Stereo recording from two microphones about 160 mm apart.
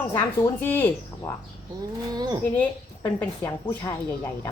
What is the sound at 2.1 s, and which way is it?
Speech, 25° right (ahead or behind).